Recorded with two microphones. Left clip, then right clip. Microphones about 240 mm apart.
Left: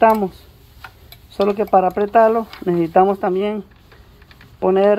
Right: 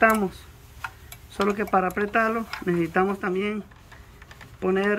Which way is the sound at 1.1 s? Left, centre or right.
Right.